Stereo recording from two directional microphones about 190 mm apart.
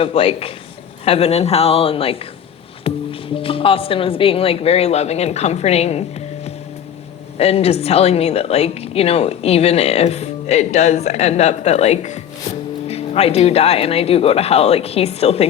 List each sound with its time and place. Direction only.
0.0 s a man's voice: 30° left (ahead or behind)
7.3 s a woman's voice: 35° left (ahead or behind)